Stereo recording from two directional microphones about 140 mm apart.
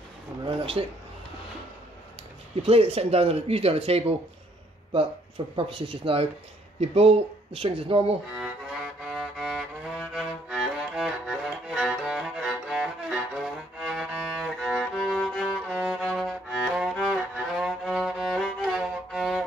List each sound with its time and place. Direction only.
0.8 s speech: 40° right (ahead or behind)
2.6 s speech: 45° right (ahead or behind)
5.6 s speech: 40° right (ahead or behind)
8.4 s music: 5° right (ahead or behind)